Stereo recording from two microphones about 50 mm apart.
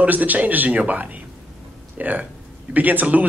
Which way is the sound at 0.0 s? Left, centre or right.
Right.